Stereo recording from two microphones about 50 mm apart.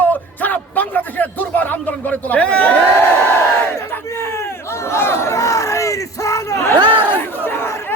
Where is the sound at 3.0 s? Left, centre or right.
Left.